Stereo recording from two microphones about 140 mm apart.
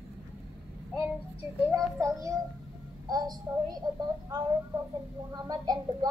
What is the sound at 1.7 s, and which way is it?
Speech, 20° right (ahead or behind).